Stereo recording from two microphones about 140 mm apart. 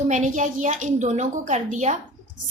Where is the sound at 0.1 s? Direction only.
60° right (ahead or behind).